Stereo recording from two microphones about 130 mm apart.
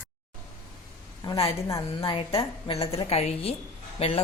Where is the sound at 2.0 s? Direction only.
45° left (ahead or behind).